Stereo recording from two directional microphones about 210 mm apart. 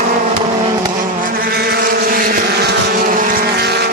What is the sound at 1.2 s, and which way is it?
Vehicle, 45° right (ahead or behind).